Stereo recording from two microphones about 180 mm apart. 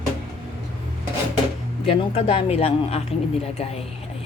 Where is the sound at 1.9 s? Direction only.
30° left (ahead or behind).